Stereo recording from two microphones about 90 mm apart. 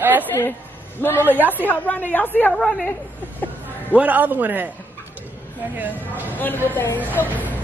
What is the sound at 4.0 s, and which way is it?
Speech, 20° right (ahead or behind).